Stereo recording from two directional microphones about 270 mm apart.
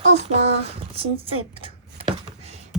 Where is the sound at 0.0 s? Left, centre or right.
Right.